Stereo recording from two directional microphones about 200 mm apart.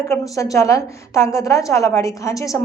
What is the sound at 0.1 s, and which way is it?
A woman's voice, 15° left (ahead or behind).